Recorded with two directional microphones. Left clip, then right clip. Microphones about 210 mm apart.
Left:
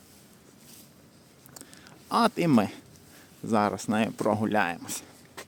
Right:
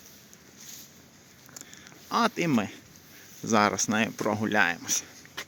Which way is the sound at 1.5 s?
20° left (ahead or behind).